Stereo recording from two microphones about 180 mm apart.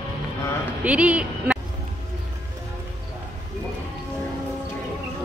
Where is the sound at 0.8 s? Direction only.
5° right (ahead or behind).